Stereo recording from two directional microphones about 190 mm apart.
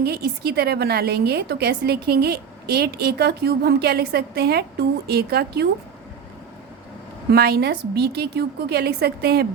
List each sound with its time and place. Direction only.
0.0 s a woman's voice: 55° right (ahead or behind)
7.3 s a woman's voice: 55° right (ahead or behind)